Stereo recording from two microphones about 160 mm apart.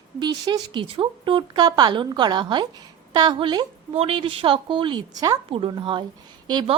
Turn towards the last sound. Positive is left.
turn(degrees=-25)  # may be behind; listen again after turning